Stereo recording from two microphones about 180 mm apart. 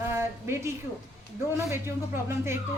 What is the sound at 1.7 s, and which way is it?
Speech, 15° right (ahead or behind).